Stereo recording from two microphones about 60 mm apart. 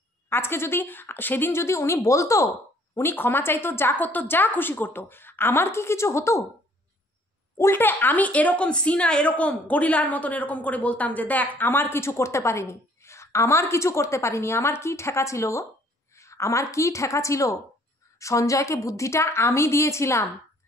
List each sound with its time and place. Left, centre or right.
0.3 s speech: left
3.0 s a woman's voice: left
7.7 s a woman's voice: left